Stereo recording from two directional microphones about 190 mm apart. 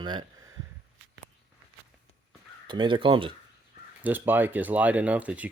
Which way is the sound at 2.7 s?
25° right (ahead or behind).